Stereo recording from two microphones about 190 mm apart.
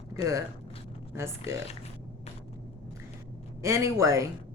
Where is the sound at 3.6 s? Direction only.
15° right (ahead or behind).